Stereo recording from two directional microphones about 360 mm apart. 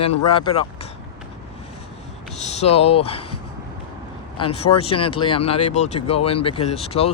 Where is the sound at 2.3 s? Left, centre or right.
Centre.